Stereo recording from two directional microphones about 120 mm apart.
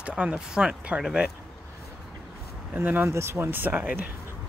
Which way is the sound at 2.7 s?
15° right (ahead or behind).